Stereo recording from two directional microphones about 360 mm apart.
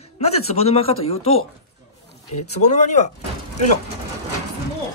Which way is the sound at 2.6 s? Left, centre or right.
Centre.